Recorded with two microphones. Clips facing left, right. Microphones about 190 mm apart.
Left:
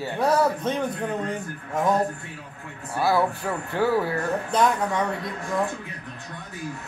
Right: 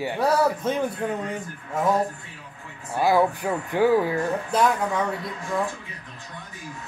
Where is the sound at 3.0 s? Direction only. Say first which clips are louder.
Right 2 dB; 15° right (ahead or behind).